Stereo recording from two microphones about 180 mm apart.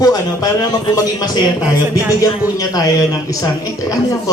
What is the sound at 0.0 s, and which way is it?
Speech, 20° left (ahead or behind).